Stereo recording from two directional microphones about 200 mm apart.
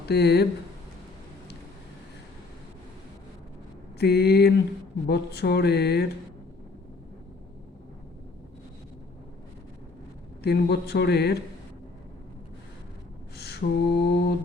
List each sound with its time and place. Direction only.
0.1 s speech: 55° left (ahead or behind)
3.9 s speech: 55° left (ahead or behind)
10.4 s speech: 55° left (ahead or behind)
13.3 s a sound: 55° left (ahead or behind)